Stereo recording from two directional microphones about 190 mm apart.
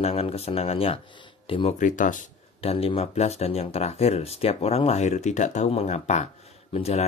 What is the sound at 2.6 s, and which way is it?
Speech, 30° left (ahead or behind).